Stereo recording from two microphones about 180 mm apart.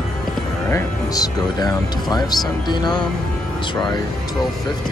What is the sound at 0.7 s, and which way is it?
Speech, 15° left (ahead or behind).